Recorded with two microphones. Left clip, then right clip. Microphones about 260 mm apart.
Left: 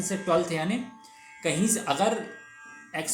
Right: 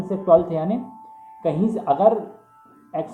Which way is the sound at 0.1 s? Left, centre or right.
Left.